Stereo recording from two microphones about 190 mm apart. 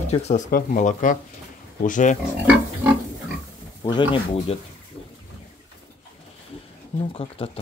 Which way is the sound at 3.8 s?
25° left (ahead or behind).